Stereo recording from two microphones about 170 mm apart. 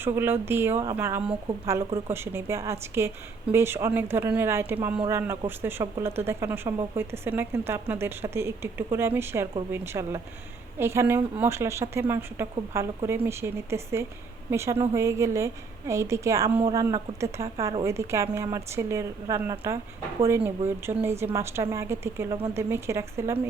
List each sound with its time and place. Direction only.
0.0 s speech: 15° right (ahead or behind)